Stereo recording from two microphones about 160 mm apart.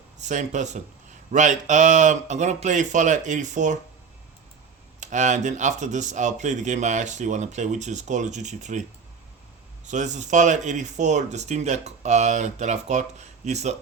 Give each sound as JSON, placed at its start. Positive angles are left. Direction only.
{"t": 0.3, "sound": "speech", "side_deg": -50}
{"t": 4.9, "sound": "speech", "side_deg": -50}
{"t": 9.8, "sound": "speech", "side_deg": -50}